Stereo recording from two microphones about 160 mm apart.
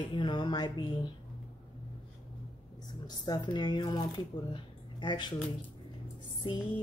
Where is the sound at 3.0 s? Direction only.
25° left (ahead or behind).